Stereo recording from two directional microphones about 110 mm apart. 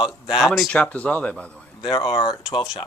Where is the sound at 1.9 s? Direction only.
50° left (ahead or behind).